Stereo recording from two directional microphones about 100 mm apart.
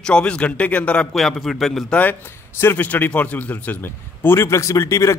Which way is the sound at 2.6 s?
20° left (ahead or behind).